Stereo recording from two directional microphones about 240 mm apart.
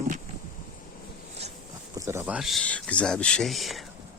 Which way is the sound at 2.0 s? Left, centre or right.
Centre.